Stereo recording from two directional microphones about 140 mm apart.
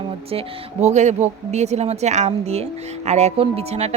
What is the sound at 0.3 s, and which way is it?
Speech, 50° right (ahead or behind).